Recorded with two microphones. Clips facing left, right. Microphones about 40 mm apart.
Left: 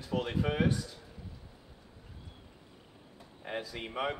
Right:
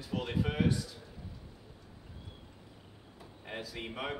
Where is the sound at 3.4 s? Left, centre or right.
Centre.